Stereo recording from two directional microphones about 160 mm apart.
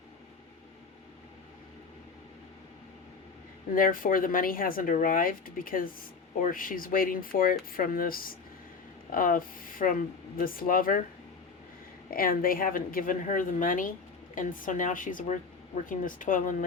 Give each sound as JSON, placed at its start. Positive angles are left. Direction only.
{"t": 3.8, "sound": "speech", "side_deg": 60}
{"t": 12.1, "sound": "speech", "side_deg": 65}